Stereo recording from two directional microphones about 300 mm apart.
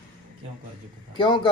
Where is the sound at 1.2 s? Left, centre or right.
Centre.